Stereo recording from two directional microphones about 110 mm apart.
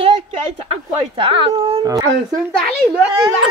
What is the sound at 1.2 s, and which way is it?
Dog, 55° right (ahead or behind).